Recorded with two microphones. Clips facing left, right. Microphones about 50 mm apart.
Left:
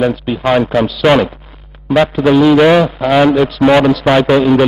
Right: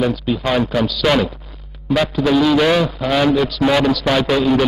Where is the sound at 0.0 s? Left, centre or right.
Left.